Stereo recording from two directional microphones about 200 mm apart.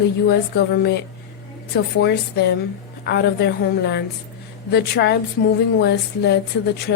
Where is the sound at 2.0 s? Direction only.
55° left (ahead or behind).